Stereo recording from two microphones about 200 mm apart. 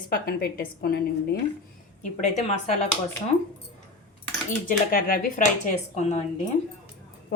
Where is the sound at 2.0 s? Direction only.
35° left (ahead or behind).